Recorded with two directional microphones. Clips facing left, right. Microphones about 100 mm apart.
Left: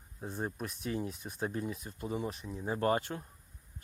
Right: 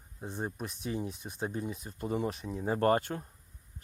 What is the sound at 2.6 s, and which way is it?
Speech, 50° right (ahead or behind).